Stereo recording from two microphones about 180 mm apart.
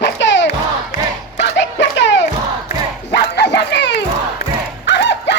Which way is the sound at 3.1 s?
70° left (ahead or behind).